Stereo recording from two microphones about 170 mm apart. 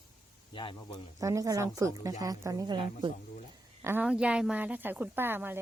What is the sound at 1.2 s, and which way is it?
Speech, 20° right (ahead or behind).